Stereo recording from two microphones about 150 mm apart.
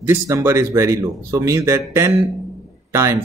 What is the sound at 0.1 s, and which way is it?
A man's voice, 15° right (ahead or behind).